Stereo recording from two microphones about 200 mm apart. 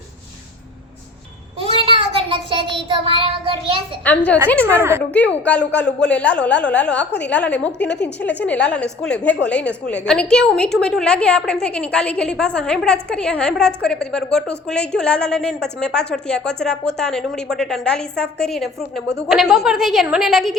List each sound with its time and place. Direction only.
1.7 s child singing: 25° right (ahead or behind)
4.1 s a woman's voice: 10° left (ahead or behind)
4.8 s speech: 15° right (ahead or behind)
5.1 s a woman's voice: 5° left (ahead or behind)